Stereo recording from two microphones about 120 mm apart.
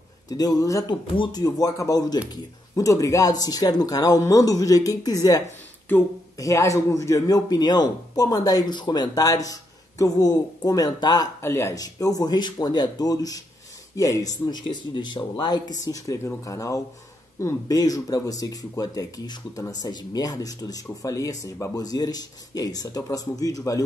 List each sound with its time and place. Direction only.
0.3 s speech: 30° left (ahead or behind)
1.1 s speech: 40° left (ahead or behind)
1.4 s speech: 30° left (ahead or behind)
11.4 s speech: 20° left (ahead or behind)